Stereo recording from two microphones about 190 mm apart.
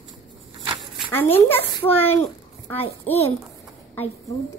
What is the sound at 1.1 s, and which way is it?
A child's voice, 10° left (ahead or behind).